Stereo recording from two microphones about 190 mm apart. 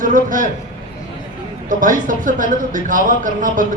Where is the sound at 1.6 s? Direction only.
45° right (ahead or behind).